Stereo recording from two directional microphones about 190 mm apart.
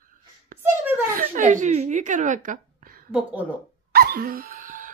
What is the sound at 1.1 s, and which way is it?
A woman's voice, 45° right (ahead or behind).